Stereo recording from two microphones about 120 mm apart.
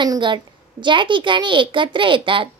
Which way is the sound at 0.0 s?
40° right (ahead or behind).